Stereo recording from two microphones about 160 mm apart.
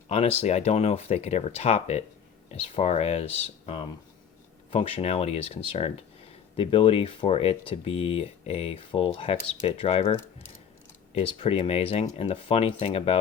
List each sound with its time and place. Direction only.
0.1 s speech: 40° left (ahead or behind)